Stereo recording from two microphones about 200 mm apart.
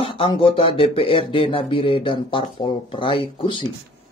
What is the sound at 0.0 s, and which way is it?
Speech, 25° left (ahead or behind).